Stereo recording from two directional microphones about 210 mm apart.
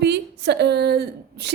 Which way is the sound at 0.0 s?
55° right (ahead or behind).